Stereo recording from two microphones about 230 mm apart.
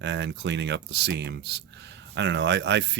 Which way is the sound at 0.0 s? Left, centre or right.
Right.